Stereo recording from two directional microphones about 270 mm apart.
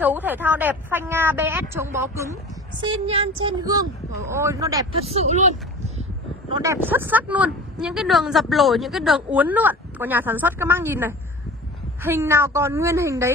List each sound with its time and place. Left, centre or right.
0.0 s speech: centre; by 5.5 s right
6.6 s speech: centre